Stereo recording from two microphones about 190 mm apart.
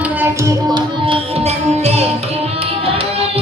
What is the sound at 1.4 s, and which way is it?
Music, 35° right (ahead or behind).